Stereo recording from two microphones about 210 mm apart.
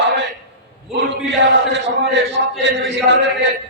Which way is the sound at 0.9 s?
55° right (ahead or behind).